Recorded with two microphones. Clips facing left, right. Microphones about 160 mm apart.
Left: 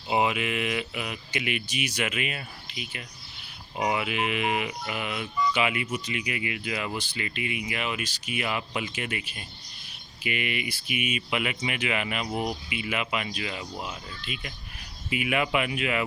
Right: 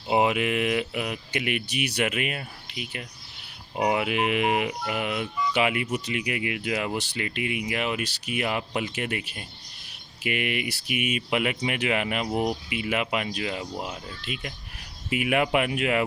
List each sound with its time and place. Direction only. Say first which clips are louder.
0.1 s speech: right 3 dB; 50° right (ahead or behind)
2.0 s speech: right 3 dB; 50° right (ahead or behind)